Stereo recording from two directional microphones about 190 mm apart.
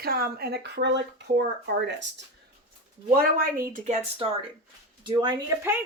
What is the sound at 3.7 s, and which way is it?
Speech, 45° right (ahead or behind).